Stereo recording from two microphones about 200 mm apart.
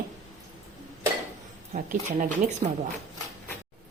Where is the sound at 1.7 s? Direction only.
40° right (ahead or behind).